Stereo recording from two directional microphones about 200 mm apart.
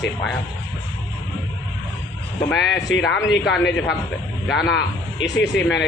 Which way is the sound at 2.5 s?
60° left (ahead or behind).